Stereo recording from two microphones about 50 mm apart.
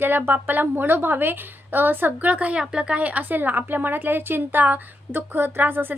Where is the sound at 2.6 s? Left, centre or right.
Centre.